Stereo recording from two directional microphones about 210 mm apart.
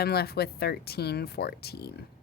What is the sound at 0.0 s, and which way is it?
Speech, 50° left (ahead or behind).